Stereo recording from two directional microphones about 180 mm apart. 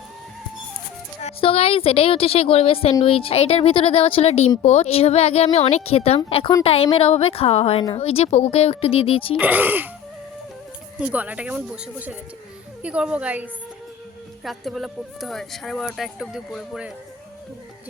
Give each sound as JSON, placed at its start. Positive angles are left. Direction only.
{"t": 1.2, "sound": "speech", "side_deg": 30}
{"t": 9.4, "sound": "speech", "side_deg": -10}
{"t": 11.0, "sound": "speech", "side_deg": -10}